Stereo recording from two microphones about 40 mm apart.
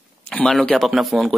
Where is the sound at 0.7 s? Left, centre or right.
Centre.